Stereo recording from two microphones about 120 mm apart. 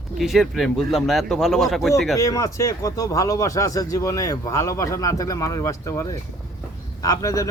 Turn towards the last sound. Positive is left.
turn(degrees=30)  # may be behind; listen again after turning